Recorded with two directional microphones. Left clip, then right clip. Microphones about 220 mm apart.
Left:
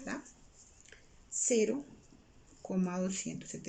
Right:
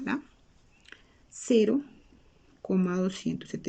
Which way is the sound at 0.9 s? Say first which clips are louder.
Right 8 dB; 50° right (ahead or behind).